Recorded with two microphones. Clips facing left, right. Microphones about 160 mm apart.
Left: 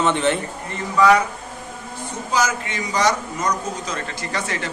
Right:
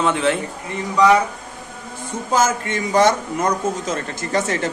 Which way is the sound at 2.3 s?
50° right (ahead or behind).